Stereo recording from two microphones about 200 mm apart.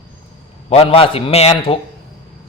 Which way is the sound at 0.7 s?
30° left (ahead or behind).